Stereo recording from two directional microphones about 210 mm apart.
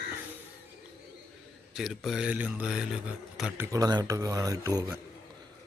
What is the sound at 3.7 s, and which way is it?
Speech, 15° right (ahead or behind).